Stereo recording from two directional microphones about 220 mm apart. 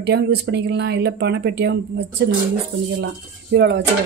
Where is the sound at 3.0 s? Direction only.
50° right (ahead or behind).